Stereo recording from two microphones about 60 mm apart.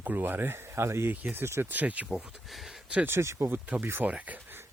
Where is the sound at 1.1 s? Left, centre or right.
Right.